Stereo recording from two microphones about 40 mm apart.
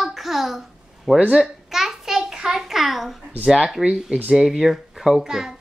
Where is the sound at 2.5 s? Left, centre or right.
Centre.